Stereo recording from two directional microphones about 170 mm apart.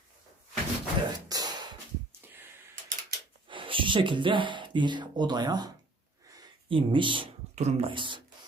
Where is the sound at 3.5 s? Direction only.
30° right (ahead or behind).